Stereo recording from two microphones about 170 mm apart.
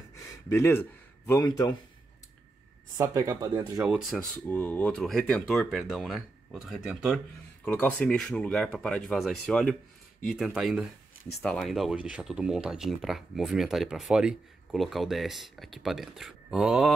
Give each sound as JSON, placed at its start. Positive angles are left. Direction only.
{"t": 0.5, "sound": "speech", "side_deg": 15}
{"t": 3.0, "sound": "speech", "side_deg": -20}
{"t": 3.8, "sound": "speech", "side_deg": 0}
{"t": 4.5, "sound": "speech", "side_deg": 10}
{"t": 7.6, "sound": "speech", "side_deg": 10}